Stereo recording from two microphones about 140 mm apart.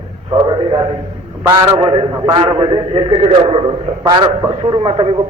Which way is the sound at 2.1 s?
30° right (ahead or behind).